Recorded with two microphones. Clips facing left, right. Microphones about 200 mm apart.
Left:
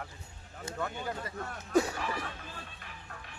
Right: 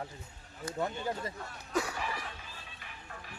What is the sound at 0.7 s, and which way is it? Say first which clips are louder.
Speech: right 2 dB; 25° right (ahead or behind).